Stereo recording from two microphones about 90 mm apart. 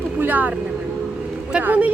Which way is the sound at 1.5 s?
15° right (ahead or behind).